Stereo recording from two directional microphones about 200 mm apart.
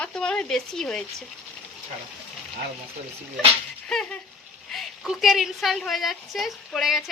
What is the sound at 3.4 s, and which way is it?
A woman's voice, centre (ahead or behind).